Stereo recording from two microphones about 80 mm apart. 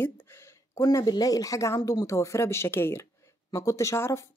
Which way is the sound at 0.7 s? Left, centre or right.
Left.